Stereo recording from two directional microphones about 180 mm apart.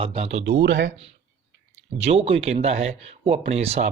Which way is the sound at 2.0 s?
35° right (ahead or behind).